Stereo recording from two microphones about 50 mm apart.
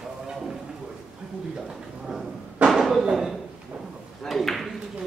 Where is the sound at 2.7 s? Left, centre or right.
Centre.